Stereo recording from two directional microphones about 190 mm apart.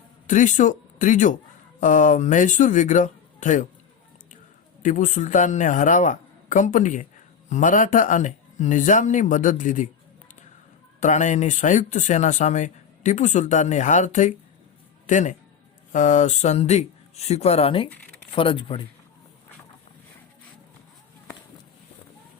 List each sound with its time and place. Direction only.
0.3 s speech: 40° left (ahead or behind)
4.8 s speech: 45° left (ahead or behind)
11.0 s a man's voice: 40° left (ahead or behind)